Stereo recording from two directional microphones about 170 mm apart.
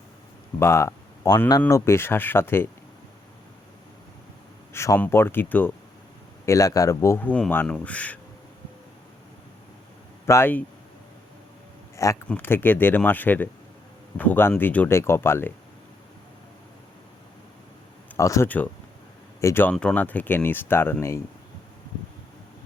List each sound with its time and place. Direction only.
0.6 s speech: 15° left (ahead or behind)
4.7 s speech: 15° left (ahead or behind)
10.2 s speech: 15° left (ahead or behind)
12.0 s speech: 20° left (ahead or behind)
18.2 s speech: 20° left (ahead or behind)